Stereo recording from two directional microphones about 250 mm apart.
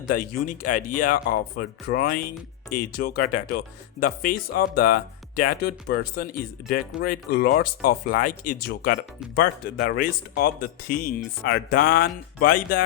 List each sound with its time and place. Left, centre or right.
0.1 s speech: left